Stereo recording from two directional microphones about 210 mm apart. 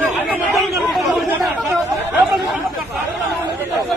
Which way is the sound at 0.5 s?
Centre (ahead or behind).